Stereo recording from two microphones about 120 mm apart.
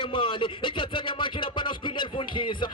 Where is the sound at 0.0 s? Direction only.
45° left (ahead or behind).